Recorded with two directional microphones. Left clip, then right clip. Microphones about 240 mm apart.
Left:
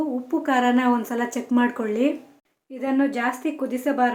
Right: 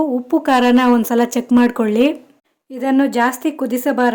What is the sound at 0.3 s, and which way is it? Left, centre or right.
Speech, right.